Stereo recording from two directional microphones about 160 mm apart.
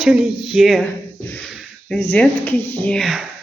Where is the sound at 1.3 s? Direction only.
5° left (ahead or behind).